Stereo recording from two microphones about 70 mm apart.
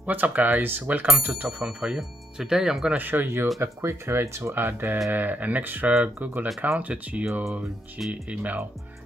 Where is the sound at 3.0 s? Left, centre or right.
Right.